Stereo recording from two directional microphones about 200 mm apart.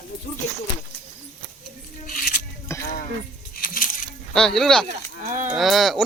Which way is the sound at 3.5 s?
45° left (ahead or behind).